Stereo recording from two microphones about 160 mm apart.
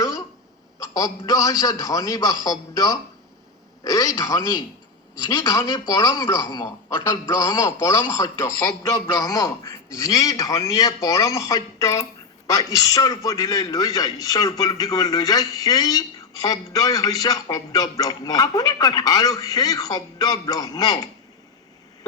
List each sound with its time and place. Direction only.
0.8 s a man's voice: 20° left (ahead or behind)